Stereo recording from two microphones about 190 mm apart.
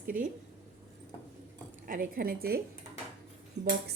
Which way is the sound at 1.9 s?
50° right (ahead or behind).